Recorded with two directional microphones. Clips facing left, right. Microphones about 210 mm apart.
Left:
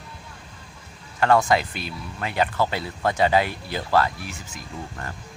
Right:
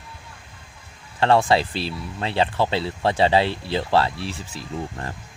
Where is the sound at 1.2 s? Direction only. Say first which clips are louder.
Right 1 dB; 30° right (ahead or behind).